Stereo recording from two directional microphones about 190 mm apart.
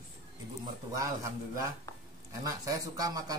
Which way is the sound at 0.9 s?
15° right (ahead or behind).